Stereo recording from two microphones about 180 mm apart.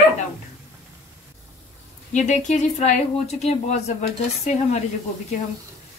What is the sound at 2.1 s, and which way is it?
Speech, 40° left (ahead or behind).